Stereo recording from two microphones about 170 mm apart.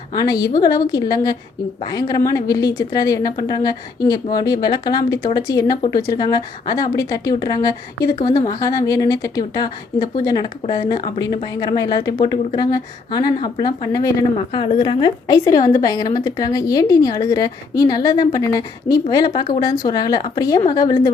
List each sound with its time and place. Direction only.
0.1 s a woman's voice: 20° left (ahead or behind)